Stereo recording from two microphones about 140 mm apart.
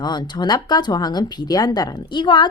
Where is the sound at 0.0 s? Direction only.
30° left (ahead or behind).